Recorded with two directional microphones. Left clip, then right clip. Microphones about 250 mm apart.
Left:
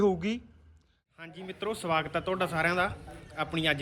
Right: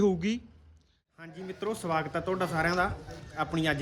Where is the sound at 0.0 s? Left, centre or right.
Centre.